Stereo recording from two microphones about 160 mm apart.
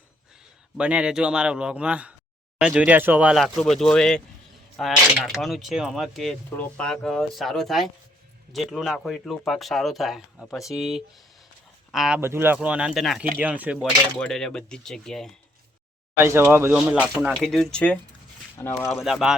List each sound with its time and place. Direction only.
0.8 s a man's voice: 5° right (ahead or behind)
12.2 s a man's voice: 15° right (ahead or behind)
14.2 s speech: 5° left (ahead or behind)
16.1 s a man's voice: 15° right (ahead or behind); by 18.9 s 15° left (ahead or behind)
19.0 s speech: centre (ahead or behind)